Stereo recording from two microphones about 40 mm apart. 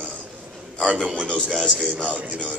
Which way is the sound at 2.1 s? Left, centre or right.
Right.